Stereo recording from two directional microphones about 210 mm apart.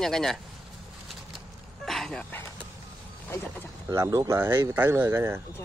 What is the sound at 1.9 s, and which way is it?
Dog, centre (ahead or behind).